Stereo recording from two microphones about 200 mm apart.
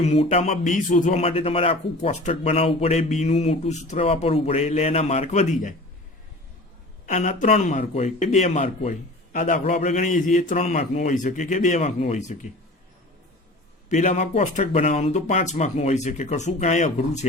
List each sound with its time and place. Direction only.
0.0 s speech: 30° left (ahead or behind)
7.0 s speech: 40° left (ahead or behind)
13.9 s speech: 35° left (ahead or behind)